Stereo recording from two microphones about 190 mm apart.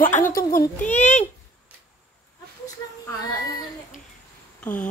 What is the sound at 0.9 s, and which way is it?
Speech, 40° left (ahead or behind).